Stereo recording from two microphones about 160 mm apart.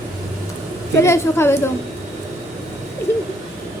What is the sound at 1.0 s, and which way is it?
Speech, 15° left (ahead or behind).